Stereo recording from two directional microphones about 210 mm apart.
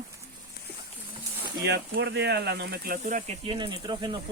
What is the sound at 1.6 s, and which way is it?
Speech, 55° right (ahead or behind).